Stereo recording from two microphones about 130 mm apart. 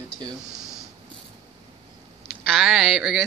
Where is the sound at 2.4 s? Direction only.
Centre (ahead or behind).